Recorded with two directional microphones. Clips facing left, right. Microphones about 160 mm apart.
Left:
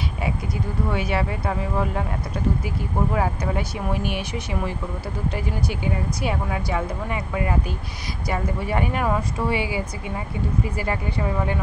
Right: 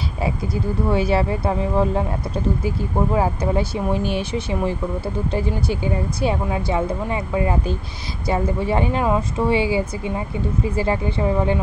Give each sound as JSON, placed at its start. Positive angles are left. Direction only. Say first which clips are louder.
{"t": 0.8, "sound": "speech", "louder": "right 6 dB", "side_deg": -30}